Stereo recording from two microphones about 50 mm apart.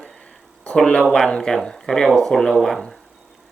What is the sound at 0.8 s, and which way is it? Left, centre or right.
Speech, centre.